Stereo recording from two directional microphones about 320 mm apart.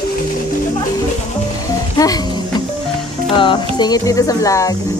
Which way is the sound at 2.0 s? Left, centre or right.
Centre.